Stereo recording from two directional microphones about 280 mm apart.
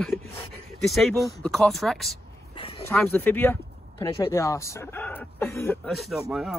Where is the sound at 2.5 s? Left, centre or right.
Centre.